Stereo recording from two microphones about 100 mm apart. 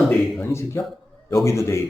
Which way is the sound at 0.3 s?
25° left (ahead or behind).